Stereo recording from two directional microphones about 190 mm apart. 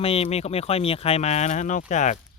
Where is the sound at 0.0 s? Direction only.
30° left (ahead or behind).